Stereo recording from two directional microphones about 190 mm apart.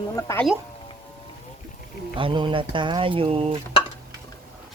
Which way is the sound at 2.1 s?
25° right (ahead or behind).